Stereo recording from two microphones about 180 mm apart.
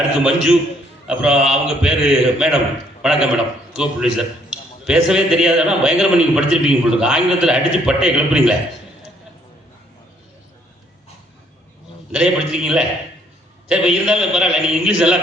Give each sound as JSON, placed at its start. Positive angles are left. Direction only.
{"t": 0.3, "sound": "a man's voice", "side_deg": -5}
{"t": 12.1, "sound": "a man's voice", "side_deg": -5}